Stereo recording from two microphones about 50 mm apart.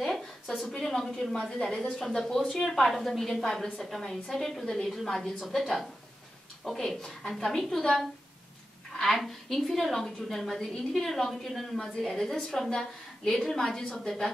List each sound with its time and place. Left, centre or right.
0.0 s a sound: centre
1.5 s a woman's voice: centre
1.8 s a woman's voice: centre
6.6 s a woman's voice: centre